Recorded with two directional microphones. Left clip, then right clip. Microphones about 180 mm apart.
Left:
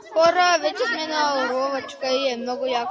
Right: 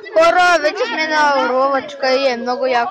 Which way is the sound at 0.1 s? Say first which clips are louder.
Right 6 dB; 5° left (ahead or behind).